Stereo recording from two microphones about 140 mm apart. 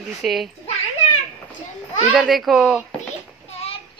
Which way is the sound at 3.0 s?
50° left (ahead or behind).